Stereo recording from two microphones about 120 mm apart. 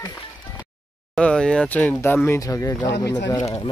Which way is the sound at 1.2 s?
5° left (ahead or behind).